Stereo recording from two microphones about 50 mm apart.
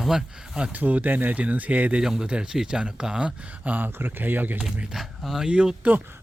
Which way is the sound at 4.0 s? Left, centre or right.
Right.